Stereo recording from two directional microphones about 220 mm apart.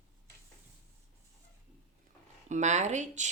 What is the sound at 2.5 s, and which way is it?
Speech, 30° right (ahead or behind).